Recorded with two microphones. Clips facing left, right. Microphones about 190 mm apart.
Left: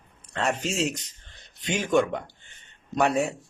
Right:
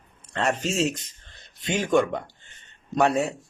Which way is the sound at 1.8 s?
20° left (ahead or behind).